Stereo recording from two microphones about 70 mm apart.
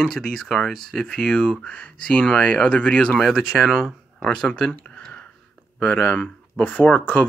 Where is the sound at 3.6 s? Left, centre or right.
Centre.